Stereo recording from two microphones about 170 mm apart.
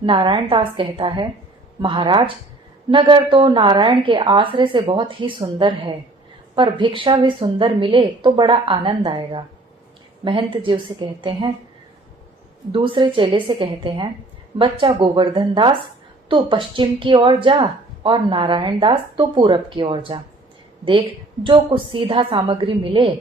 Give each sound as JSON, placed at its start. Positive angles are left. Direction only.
{"t": 0.0, "sound": "a woman's voice", "side_deg": -30}
{"t": 12.7, "sound": "speech", "side_deg": -30}
{"t": 21.4, "sound": "a woman's voice", "side_deg": -30}